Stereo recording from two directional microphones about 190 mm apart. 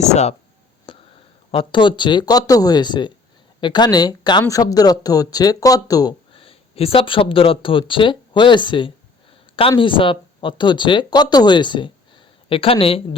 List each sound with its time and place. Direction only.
0.0 s speech: 35° left (ahead or behind)
0.9 s a sound: 30° left (ahead or behind)
1.5 s speech: 25° left (ahead or behind)